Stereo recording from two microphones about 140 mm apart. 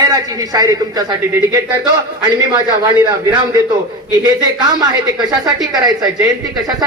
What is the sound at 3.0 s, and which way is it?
A man's voice, 30° right (ahead or behind).